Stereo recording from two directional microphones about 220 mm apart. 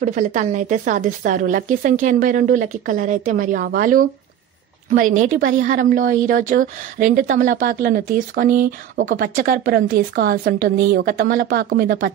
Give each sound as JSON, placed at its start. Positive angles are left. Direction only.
{"t": 0.0, "sound": "speech", "side_deg": -35}